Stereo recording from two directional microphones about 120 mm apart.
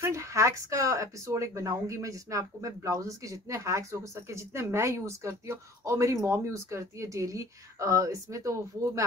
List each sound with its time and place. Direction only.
0.0 s speech: 25° right (ahead or behind)